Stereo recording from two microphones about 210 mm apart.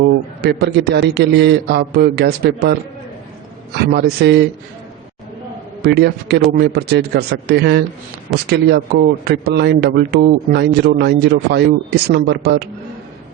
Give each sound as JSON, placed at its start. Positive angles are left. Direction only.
{"t": 0.4, "sound": "speech", "side_deg": -50}
{"t": 3.9, "sound": "speech", "side_deg": -50}
{"t": 5.8, "sound": "speech", "side_deg": -55}